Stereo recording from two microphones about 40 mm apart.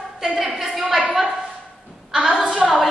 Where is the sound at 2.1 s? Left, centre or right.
Centre.